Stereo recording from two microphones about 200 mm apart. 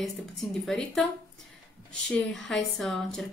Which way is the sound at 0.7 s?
5° left (ahead or behind).